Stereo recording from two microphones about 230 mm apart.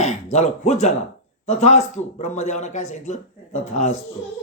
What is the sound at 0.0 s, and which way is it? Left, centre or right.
Speech, left.